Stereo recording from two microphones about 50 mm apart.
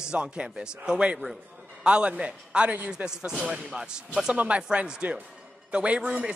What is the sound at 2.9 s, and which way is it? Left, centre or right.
Speech, centre.